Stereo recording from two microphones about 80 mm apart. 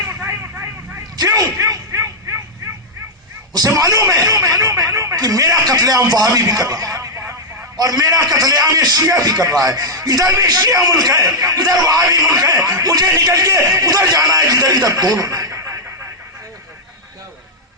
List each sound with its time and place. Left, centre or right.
0.0 s vehicle: right
1.1 s a sound: right
3.8 s a man's voice: right